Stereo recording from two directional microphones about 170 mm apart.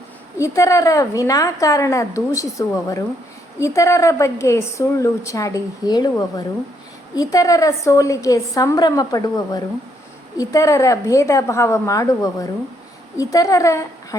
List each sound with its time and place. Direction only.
0.3 s a woman's voice: 20° left (ahead or behind)